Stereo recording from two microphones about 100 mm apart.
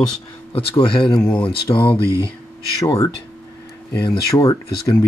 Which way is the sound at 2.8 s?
35° left (ahead or behind).